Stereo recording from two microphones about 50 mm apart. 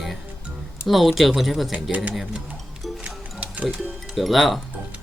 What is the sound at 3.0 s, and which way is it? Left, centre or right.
Music, right.